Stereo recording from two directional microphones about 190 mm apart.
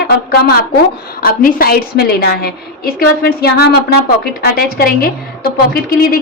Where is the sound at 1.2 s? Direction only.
50° left (ahead or behind).